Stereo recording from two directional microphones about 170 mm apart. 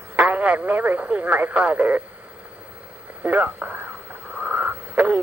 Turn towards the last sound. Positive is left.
turn(degrees=-10)  # may be behind; listen again after turning